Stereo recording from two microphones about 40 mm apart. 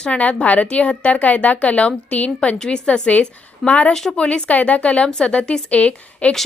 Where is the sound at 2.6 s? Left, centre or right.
Left.